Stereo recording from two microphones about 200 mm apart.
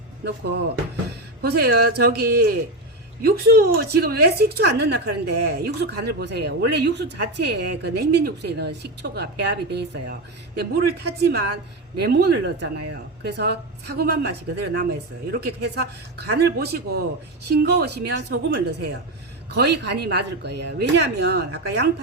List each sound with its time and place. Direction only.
0.3 s a woman's voice: 55° right (ahead or behind)